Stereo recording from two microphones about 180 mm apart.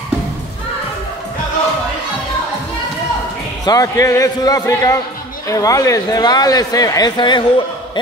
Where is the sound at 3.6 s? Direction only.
20° left (ahead or behind).